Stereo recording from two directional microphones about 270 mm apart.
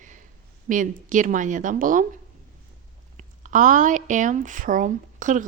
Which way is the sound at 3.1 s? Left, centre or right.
Right.